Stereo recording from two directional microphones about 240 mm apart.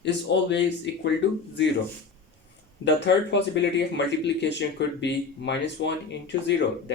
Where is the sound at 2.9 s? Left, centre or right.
Left.